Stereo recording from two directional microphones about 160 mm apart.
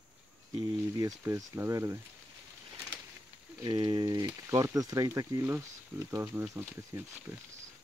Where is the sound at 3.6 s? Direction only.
25° right (ahead or behind).